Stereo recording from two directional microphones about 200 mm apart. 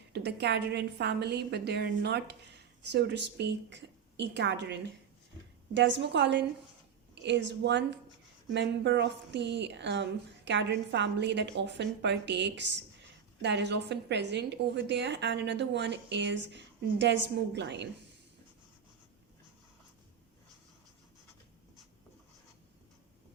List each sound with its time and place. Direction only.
0.1 s a woman's voice: 55° right (ahead or behind)